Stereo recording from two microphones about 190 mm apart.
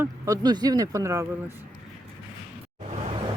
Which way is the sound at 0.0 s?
20° right (ahead or behind).